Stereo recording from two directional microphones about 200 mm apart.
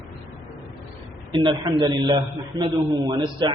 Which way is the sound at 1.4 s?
25° right (ahead or behind).